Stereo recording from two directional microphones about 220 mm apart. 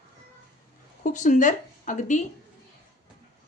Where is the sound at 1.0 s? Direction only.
35° left (ahead or behind).